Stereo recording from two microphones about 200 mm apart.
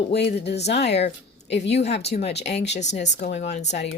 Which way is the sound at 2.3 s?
60° left (ahead or behind).